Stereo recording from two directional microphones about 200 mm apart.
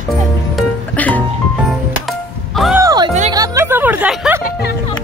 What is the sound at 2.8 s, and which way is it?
Music, 20° right (ahead or behind).